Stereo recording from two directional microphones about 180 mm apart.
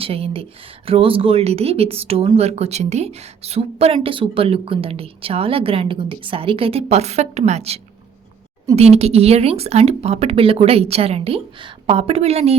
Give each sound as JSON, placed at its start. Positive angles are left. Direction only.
{"t": 0.0, "sound": "speech", "side_deg": -30}